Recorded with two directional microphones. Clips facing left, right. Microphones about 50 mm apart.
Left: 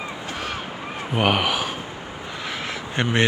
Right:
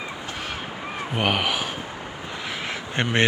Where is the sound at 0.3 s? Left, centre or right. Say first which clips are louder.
Left 4 dB; centre.